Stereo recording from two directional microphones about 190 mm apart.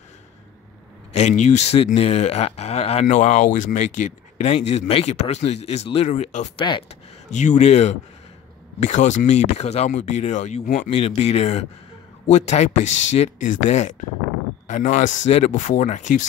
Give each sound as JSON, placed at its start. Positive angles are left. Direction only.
{"t": 1.1, "sound": "speech", "side_deg": 35}
{"t": 6.6, "sound": "speech", "side_deg": 25}
{"t": 7.2, "sound": "speech", "side_deg": 40}